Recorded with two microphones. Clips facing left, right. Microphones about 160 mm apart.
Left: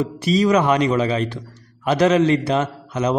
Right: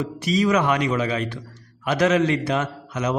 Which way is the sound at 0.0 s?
30° left (ahead or behind).